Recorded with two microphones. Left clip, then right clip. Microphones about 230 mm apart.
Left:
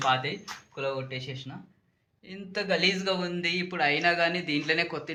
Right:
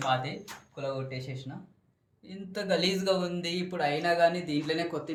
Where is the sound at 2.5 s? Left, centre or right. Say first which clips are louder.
Left 2 dB; centre.